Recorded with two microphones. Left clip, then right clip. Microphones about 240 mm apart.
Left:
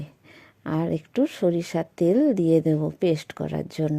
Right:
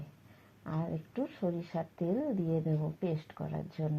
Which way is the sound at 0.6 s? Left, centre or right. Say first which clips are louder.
Left 13 dB; left.